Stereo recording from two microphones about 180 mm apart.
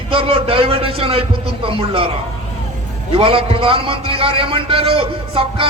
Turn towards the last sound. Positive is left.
turn(degrees=-30)  # may be behind; listen again after turning